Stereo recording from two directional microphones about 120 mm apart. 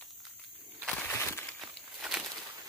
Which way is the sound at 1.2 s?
20° left (ahead or behind).